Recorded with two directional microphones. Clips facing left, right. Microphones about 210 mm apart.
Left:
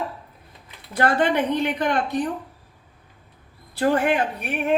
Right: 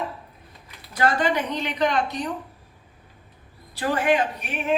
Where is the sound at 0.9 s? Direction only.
55° left (ahead or behind).